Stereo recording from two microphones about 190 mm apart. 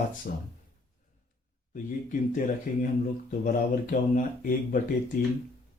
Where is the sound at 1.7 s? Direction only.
45° left (ahead or behind).